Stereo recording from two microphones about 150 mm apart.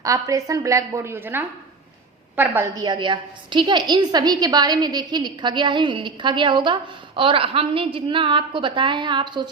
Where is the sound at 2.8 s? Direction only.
30° right (ahead or behind).